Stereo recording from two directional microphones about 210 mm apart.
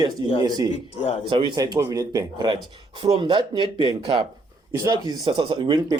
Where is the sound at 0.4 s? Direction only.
20° right (ahead or behind).